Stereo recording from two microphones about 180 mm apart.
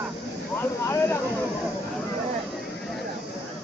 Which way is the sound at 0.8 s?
15° left (ahead or behind).